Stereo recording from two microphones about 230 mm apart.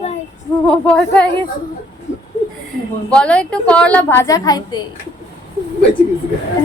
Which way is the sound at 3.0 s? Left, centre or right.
Centre.